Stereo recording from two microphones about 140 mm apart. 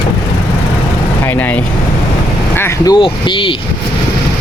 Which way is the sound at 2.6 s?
20° left (ahead or behind).